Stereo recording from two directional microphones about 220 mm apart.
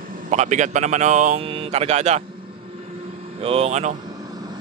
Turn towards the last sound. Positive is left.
turn(degrees=-30)  # may be behind; listen again after turning